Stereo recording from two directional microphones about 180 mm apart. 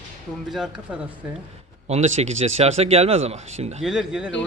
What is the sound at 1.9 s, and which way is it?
Speech, 40° right (ahead or behind).